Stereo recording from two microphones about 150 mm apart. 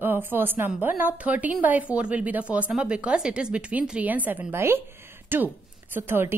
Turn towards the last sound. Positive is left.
turn(degrees=-15)  # may be behind; listen again after turning